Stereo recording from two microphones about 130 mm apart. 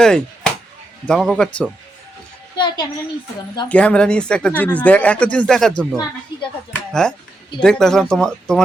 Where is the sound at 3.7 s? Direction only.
10° left (ahead or behind).